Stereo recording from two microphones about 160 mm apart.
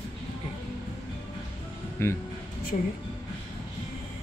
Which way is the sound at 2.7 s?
45° left (ahead or behind).